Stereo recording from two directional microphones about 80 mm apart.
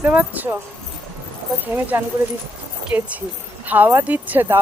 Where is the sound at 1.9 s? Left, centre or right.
Right.